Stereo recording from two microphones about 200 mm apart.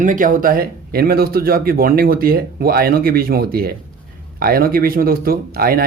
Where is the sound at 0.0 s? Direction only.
40° right (ahead or behind).